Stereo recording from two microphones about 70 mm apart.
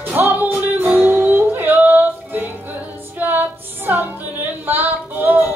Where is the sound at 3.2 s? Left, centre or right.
Right.